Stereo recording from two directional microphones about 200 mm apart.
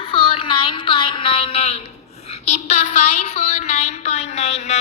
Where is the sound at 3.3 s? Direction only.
35° left (ahead or behind).